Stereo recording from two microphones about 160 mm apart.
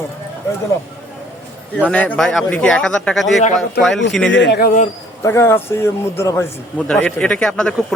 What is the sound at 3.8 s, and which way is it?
A man's voice, 85° left.